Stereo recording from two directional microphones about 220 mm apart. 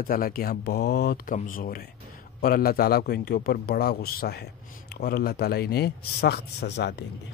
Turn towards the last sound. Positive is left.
turn(degrees=50)  # may be behind; listen again after turning